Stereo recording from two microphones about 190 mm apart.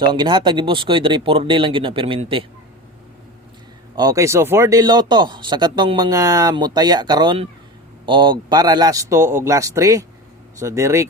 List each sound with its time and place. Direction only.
0.1 s speech: 25° right (ahead or behind)
3.9 s a man's voice: 20° right (ahead or behind)